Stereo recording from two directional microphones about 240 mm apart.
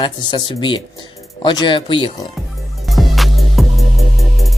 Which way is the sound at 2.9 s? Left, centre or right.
Centre.